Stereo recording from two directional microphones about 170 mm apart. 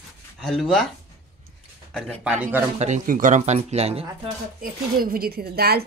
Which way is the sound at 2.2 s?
10° right (ahead or behind).